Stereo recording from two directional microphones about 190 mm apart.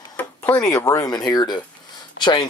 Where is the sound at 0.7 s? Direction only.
15° left (ahead or behind).